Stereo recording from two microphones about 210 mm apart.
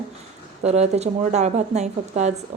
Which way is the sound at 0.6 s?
30° right (ahead or behind).